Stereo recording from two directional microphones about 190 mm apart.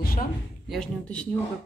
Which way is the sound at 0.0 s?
50° left (ahead or behind).